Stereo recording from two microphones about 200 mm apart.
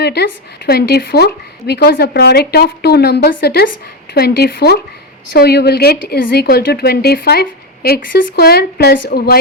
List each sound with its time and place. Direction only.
0.0 s a woman's voice: 55° left (ahead or behind)